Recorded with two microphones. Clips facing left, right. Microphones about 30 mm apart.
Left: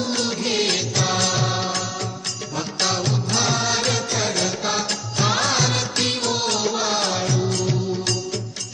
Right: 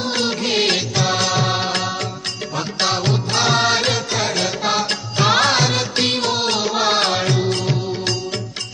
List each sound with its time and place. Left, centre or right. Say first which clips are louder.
0.0 s music: right 3 dB; right
1.7 s music: right 4 dB; right
2.6 s music: right 3 dB; right
3.1 s music: right 4 dB; right
3.7 s music: right 4 dB; right
5.4 s music: right 5 dB; right
5.6 s music: right 3 dB; right